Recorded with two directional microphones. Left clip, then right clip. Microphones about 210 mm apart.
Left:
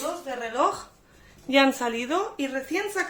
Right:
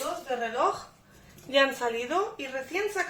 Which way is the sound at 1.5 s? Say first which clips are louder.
Left 3 dB; 40° left (ahead or behind).